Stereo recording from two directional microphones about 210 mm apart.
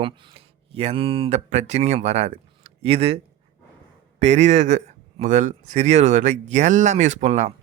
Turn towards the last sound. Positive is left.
turn(degrees=-35)  # may be behind; listen again after turning